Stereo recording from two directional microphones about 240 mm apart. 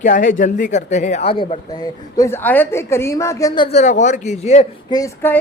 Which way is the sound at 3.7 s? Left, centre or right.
Left.